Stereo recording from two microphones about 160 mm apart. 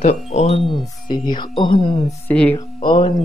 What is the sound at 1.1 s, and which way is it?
A woman's voice, 30° left (ahead or behind).